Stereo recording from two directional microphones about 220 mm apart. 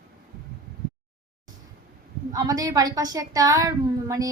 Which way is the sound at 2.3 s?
15° right (ahead or behind).